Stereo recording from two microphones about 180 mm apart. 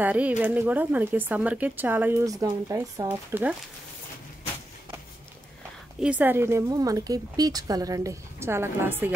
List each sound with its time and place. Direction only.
0.0 s speech: 10° right (ahead or behind)
5.9 s speech: 5° right (ahead or behind)